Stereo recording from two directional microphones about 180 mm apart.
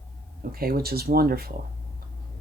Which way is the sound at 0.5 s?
55° right (ahead or behind).